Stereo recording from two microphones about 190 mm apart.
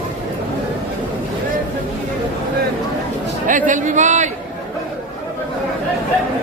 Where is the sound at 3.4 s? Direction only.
40° right (ahead or behind).